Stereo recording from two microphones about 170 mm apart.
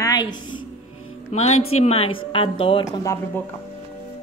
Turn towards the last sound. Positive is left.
turn(degrees=20)  # may be behind; listen again after turning